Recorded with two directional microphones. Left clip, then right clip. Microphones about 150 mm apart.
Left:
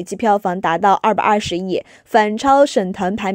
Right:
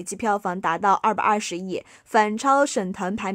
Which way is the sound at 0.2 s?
30° left (ahead or behind).